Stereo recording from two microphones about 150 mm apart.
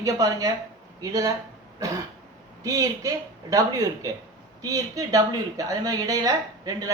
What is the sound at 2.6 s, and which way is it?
A woman's voice, 25° right (ahead or behind).